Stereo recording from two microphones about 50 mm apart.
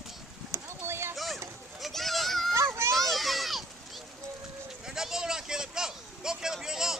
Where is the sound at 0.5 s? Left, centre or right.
Right.